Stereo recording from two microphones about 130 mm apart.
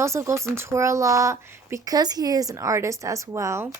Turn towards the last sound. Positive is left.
turn(degrees=-20)  # may be behind; listen again after turning